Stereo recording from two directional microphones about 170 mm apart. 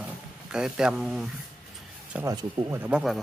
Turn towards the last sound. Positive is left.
turn(degrees=-5)  # may be behind; listen again after turning